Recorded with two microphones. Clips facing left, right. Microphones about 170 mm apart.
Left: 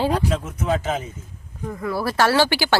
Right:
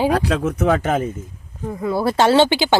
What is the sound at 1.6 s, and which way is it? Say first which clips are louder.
Speech: right 5 dB; 20° right (ahead or behind).